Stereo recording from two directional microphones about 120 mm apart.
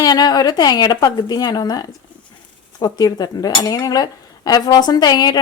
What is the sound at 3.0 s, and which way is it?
Cutlery, 30° left (ahead or behind).